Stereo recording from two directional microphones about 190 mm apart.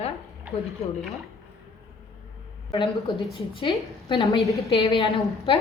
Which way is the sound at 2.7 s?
25° left (ahead or behind).